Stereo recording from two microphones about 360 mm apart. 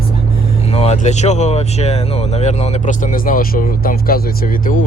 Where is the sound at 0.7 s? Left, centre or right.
Centre.